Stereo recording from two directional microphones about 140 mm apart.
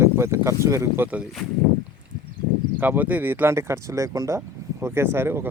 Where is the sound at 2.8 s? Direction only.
10° right (ahead or behind).